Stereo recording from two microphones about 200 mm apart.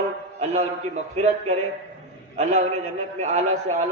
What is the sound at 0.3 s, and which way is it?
A man's voice, 35° right (ahead or behind).